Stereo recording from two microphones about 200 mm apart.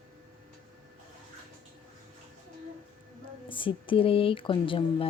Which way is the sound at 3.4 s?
25° left (ahead or behind).